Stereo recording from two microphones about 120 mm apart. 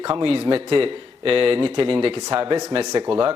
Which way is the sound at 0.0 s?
45° right (ahead or behind).